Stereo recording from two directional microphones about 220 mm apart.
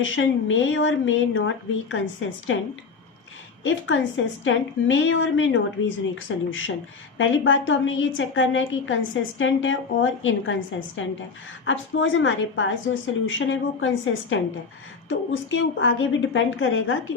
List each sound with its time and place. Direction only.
0.0 s a woman's voice: 60° left (ahead or behind)
3.6 s a woman's voice: 60° left (ahead or behind)